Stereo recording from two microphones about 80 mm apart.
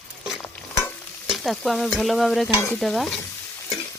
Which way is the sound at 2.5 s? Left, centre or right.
Left.